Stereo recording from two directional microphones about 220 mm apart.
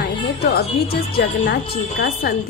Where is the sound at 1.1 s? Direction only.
45° left (ahead or behind).